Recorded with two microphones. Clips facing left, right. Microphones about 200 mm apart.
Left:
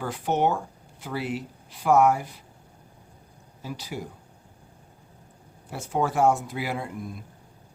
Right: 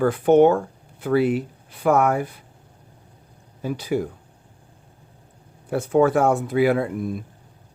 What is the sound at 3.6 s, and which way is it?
Speech, 55° right (ahead or behind).